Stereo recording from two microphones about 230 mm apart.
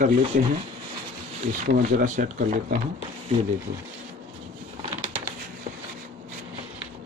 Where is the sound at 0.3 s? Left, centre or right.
Right.